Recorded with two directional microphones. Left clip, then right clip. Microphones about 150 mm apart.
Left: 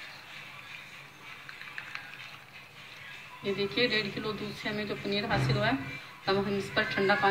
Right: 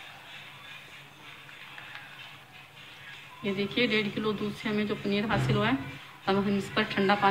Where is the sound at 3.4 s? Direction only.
50° right (ahead or behind).